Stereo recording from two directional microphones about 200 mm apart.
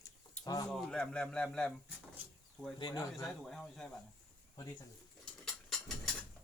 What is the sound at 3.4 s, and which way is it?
Speech, 5° left (ahead or behind).